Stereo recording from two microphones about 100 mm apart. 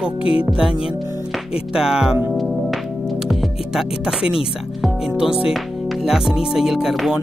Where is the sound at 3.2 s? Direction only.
5° right (ahead or behind).